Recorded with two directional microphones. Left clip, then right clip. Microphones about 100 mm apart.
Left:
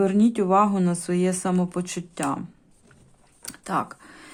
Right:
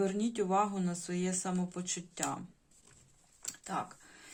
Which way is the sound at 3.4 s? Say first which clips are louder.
Left 11 dB; 65° left (ahead or behind).